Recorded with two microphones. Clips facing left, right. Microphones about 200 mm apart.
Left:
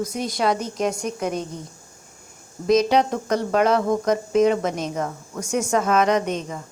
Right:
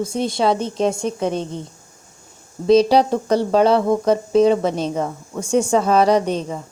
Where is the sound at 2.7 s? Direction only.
35° right (ahead or behind).